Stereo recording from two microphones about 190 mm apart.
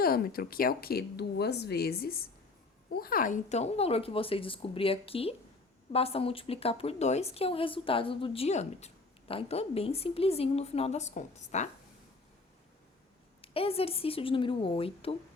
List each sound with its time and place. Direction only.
0.0 s a woman's voice: 50° left (ahead or behind)
13.4 s a woman's voice: 30° left (ahead or behind)